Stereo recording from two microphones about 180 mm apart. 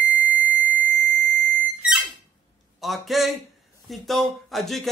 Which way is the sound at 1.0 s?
45° right (ahead or behind).